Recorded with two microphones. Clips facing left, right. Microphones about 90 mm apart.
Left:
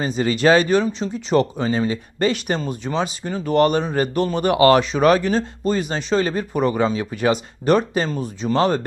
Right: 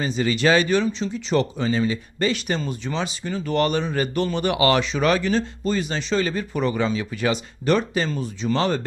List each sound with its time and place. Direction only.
0.0 s speech: 40° left (ahead or behind)